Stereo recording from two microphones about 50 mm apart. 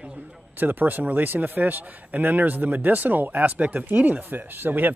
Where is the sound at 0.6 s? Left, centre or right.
Right.